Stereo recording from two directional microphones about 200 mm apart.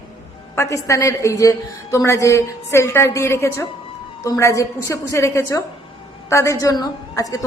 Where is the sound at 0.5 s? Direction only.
15° left (ahead or behind).